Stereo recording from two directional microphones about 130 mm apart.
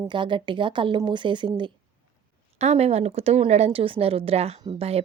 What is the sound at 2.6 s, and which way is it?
A woman's voice, 55° right (ahead or behind).